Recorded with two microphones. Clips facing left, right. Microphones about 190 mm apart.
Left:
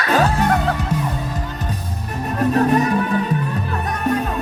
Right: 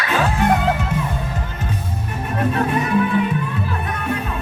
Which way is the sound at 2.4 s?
40° left (ahead or behind).